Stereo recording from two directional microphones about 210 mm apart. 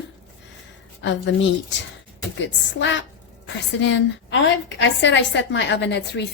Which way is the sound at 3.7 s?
60° left (ahead or behind).